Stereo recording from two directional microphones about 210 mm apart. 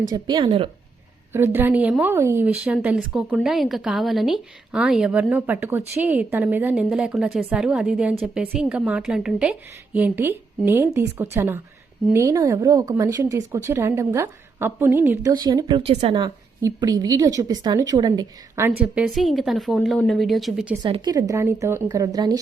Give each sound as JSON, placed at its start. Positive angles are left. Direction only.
{"t": 0.1, "sound": "speech", "side_deg": -20}
{"t": 1.3, "sound": "a woman's voice", "side_deg": -10}
{"t": 18.8, "sound": "a woman's voice", "side_deg": -5}
{"t": 20.8, "sound": "a woman's voice", "side_deg": -20}